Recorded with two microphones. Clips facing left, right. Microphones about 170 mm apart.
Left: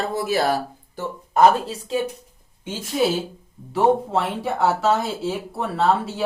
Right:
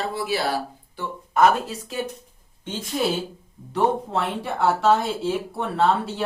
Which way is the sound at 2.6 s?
5° left (ahead or behind).